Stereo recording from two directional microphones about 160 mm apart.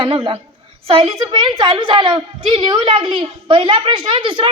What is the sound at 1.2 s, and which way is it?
A woman's voice, 25° right (ahead or behind).